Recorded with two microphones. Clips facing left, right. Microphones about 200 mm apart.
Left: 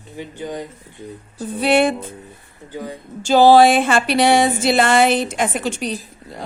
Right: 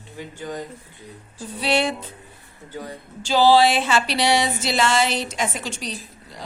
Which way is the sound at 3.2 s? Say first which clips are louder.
Left 5 dB; 50° left (ahead or behind).